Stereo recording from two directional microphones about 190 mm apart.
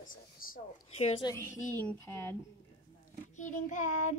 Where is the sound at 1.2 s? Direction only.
10° left (ahead or behind).